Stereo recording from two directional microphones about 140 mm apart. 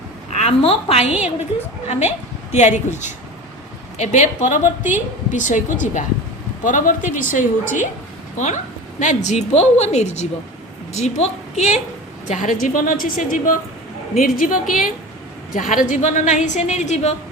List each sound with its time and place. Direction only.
0.3 s a woman's voice: 45° left (ahead or behind); by 4.7 s 65° left (ahead or behind)
4.8 s a woman's voice: 15° right (ahead or behind)
5.3 s a woman's voice: 65° left (ahead or behind)
12.3 s a woman's voice: 65° left (ahead or behind)
14.2 s a woman's voice: 85° left
15.5 s a woman's voice: 70° left (ahead or behind)